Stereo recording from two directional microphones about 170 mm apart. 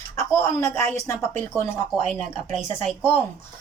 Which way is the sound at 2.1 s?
Centre (ahead or behind).